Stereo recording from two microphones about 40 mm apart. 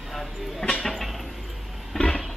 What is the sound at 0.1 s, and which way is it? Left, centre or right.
Train, centre.